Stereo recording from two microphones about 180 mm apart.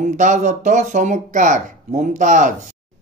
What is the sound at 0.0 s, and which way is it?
Speech, 45° right (ahead or behind).